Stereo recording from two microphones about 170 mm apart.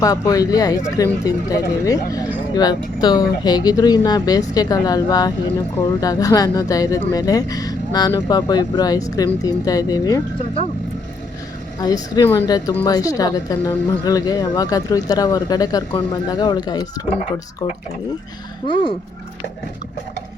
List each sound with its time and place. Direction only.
0.0 s speech: 20° left (ahead or behind)
11.8 s speech: 25° left (ahead or behind)